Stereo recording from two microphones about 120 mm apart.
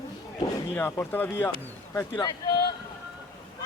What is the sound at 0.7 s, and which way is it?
Speech, 15° left (ahead or behind).